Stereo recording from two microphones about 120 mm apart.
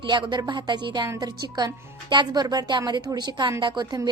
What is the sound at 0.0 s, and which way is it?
A woman's voice, 40° right (ahead or behind).